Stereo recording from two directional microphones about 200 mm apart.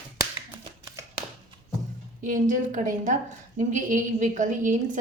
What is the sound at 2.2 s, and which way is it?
A woman's voice, 40° right (ahead or behind).